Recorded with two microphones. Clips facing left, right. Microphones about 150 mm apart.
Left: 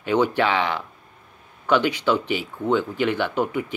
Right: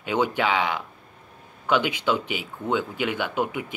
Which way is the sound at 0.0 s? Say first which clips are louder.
Left 3 dB; 15° right (ahead or behind).